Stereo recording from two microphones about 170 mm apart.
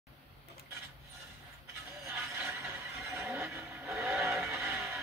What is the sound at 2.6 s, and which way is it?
Neigh, 15° right (ahead or behind).